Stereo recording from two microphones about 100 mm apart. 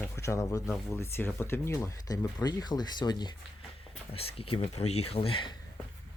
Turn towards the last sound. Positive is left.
turn(degrees=65)  # may be behind; listen again after turning